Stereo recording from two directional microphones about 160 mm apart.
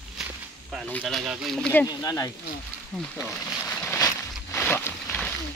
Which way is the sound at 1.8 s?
20° left (ahead or behind).